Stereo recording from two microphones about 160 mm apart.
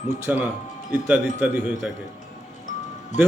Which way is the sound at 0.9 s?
10° right (ahead or behind).